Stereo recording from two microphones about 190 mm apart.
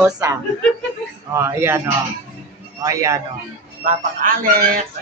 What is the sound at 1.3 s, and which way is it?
Speech, 15° right (ahead or behind).